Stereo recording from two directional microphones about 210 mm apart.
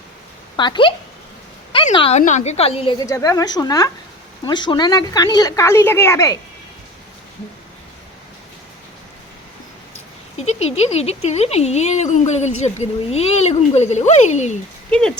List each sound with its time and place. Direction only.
0.5 s a woman's voice: 20° left (ahead or behind)
10.3 s speech: 30° left (ahead or behind)
14.8 s speech: 5° left (ahead or behind)